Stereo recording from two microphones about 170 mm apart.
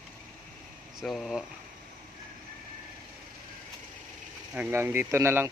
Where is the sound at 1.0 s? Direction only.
Centre (ahead or behind).